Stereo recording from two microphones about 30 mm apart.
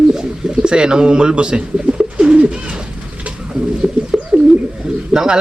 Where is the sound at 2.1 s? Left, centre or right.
Right.